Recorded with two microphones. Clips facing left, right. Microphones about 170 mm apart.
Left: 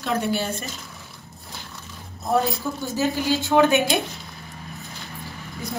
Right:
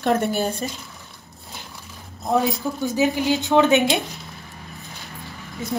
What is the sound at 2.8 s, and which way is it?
A woman's voice, 15° right (ahead or behind).